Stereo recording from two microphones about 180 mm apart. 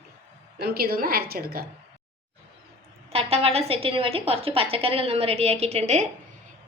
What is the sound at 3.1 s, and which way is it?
A woman's voice, 35° right (ahead or behind).